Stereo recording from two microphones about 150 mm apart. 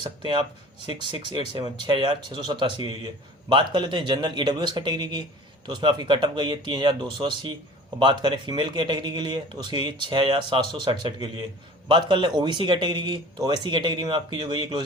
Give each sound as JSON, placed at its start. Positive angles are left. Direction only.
{"t": 0.0, "sound": "speech", "side_deg": -30}